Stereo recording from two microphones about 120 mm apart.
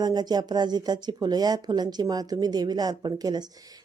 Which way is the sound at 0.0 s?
35° right (ahead or behind).